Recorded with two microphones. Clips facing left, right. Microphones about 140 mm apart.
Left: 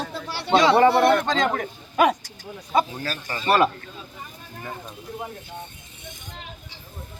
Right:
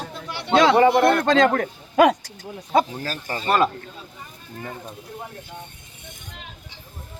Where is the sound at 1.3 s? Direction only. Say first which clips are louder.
Right 6 dB; 80° right.